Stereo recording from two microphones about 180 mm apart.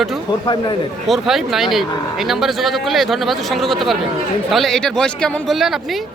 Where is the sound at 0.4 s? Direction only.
25° left (ahead or behind).